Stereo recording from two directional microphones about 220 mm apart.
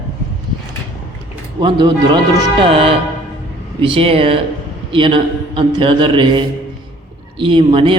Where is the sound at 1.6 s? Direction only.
20° right (ahead or behind).